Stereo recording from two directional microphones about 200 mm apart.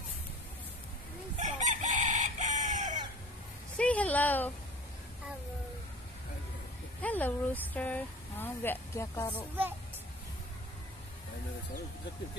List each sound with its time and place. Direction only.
1.4 s chicken: 35° right (ahead or behind)
3.7 s a sound: 5° left (ahead or behind)
7.0 s speech: 10° left (ahead or behind)